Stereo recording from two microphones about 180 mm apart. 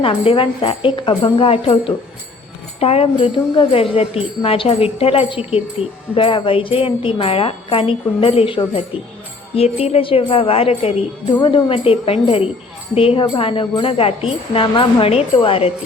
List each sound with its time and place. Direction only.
0.0 s jingle bell: 30° left (ahead or behind)
2.8 s speech: 30° left (ahead or behind)
6.1 s jingle bell: 30° left (ahead or behind)
9.6 s speech: 35° left (ahead or behind)
13.2 s jingle bell: 30° left (ahead or behind)